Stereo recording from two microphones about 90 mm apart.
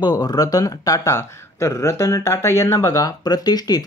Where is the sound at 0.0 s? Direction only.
50° left (ahead or behind).